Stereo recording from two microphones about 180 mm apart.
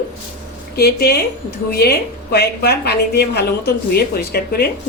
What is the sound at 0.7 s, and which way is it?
A woman's voice, 60° left (ahead or behind).